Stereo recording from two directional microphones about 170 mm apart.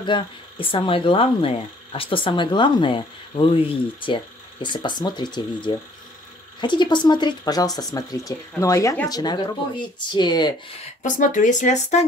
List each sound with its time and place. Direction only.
0.0 s speech: 30° left (ahead or behind)
11.0 s speech: 50° left (ahead or behind)